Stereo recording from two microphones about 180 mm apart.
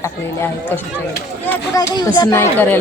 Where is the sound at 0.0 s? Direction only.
15° left (ahead or behind).